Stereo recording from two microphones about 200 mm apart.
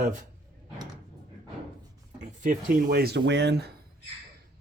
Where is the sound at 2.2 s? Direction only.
40° right (ahead or behind).